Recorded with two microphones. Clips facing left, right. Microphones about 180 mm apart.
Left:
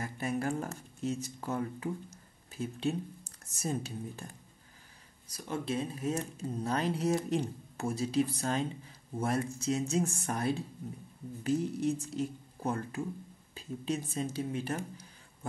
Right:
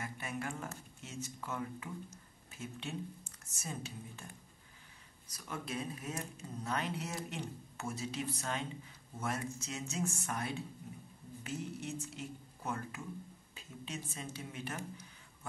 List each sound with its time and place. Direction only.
0.0 s speech: 35° left (ahead or behind)
5.3 s speech: 30° left (ahead or behind)